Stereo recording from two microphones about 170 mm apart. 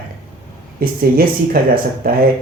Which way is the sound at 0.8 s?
60° right (ahead or behind).